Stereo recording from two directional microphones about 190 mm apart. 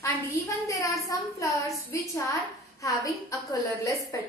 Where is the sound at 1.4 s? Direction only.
15° left (ahead or behind).